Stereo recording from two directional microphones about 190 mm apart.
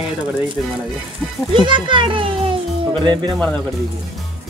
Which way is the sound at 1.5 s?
25° right (ahead or behind).